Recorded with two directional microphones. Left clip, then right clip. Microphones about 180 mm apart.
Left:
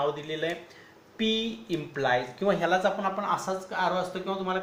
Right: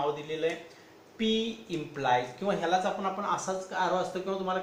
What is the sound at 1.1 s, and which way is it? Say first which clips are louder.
Speech: left 1 dB; 50° left (ahead or behind).